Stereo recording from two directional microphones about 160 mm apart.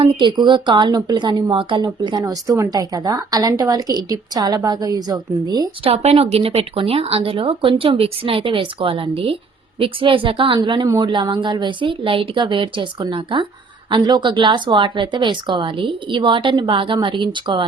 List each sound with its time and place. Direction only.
0.0 s speech: 30° right (ahead or behind)
5.9 s speech: 40° right (ahead or behind)